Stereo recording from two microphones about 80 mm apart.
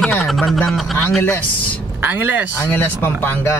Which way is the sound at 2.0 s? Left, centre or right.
Right.